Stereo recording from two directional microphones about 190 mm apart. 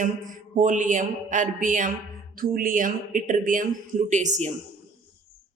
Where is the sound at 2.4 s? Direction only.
45° right (ahead or behind).